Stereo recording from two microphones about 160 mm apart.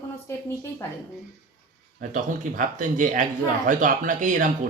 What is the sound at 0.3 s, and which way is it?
Speech, 15° left (ahead or behind).